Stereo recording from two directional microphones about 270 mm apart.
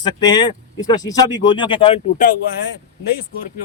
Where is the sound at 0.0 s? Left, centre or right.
Centre.